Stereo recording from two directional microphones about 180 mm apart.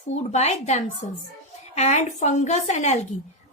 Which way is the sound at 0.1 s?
40° left (ahead or behind).